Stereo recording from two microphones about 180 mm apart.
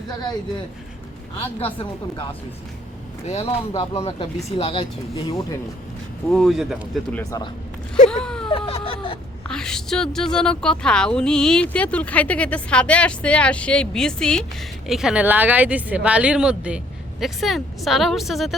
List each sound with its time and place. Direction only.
1.6 s speech: 30° left (ahead or behind)
3.2 s speech: 35° left (ahead or behind)
6.3 s a woman's voice: centre (ahead or behind)
7.2 s speech: 20° left (ahead or behind)
7.9 s speech: 40° left (ahead or behind)
8.2 s a sound: 5° left (ahead or behind)
8.4 s a sound: 30° left (ahead or behind)
9.5 s a woman's voice: 5° left (ahead or behind)